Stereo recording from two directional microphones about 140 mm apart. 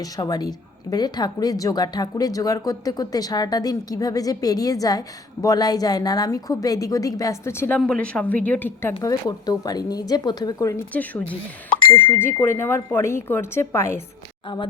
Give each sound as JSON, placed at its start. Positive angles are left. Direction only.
{"t": 0.0, "sound": "a woman's voice", "side_deg": 30}
{"t": 7.8, "sound": "speech", "side_deg": 5}
{"t": 8.9, "sound": "a woman's voice", "side_deg": 25}
{"t": 10.9, "sound": "speech", "side_deg": 10}
{"t": 14.4, "sound": "speech", "side_deg": 35}